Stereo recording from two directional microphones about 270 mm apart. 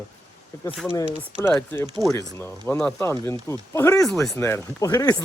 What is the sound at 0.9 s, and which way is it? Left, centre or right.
Speech, centre.